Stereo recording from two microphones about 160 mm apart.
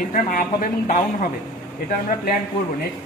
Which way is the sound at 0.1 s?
60° left (ahead or behind).